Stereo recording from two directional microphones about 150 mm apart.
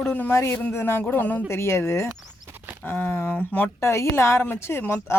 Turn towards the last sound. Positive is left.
turn(degrees=15)  # may be behind; listen again after turning